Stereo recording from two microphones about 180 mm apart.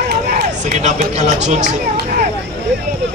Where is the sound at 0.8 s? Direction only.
40° right (ahead or behind).